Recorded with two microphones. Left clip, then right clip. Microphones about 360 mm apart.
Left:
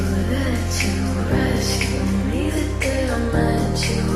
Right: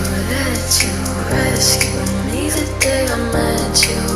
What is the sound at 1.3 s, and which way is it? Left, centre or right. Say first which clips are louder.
Music: right 5 dB; right.